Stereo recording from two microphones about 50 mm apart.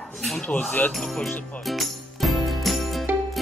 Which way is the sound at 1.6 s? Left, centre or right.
Centre.